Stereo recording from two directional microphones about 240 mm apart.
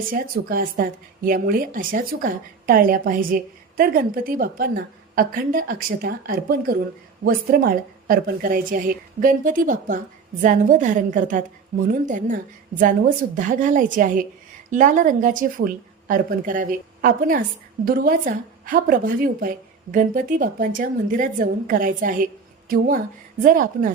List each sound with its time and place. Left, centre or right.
0.0 s a woman's voice: right
23.4 s a woman's voice: right